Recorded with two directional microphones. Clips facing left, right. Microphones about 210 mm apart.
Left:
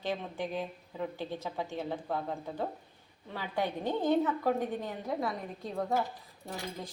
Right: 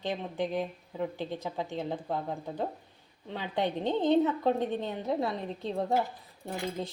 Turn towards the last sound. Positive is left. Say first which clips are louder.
# right 5 dB
turn(degrees=-25)  # may be behind; listen again after turning